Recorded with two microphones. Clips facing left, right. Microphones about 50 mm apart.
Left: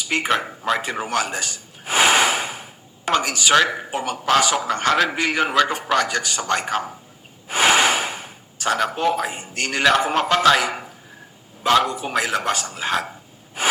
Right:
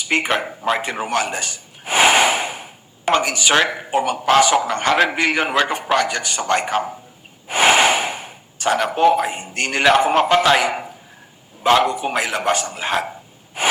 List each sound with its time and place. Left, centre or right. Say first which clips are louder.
0.0 s speech: right 2 dB; right
0.8 s gasp: right 2 dB; right
3.1 s a man's voice: right 3 dB; right
3.5 s speech: left 1 dB; right
3.9 s a man's voice: right 5 dB; right